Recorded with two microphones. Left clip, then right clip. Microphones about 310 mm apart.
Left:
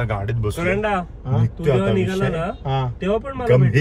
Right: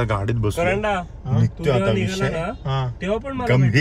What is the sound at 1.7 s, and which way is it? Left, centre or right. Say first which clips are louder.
Speech: left 1 dB; centre.